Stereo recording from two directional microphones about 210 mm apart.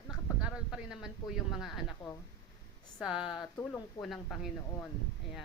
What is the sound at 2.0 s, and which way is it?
Speech, 25° left (ahead or behind).